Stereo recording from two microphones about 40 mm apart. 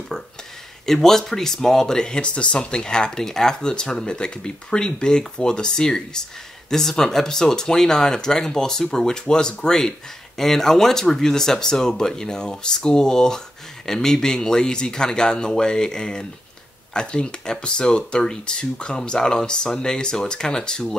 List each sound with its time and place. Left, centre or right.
0.1 s speech: centre